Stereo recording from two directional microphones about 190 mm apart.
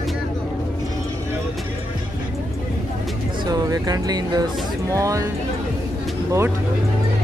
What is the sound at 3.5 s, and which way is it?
Speech, 20° right (ahead or behind).